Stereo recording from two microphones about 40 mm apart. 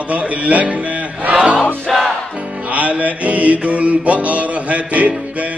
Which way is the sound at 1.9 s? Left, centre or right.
Centre.